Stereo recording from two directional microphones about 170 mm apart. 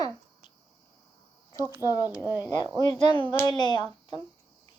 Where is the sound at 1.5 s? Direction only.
15° right (ahead or behind).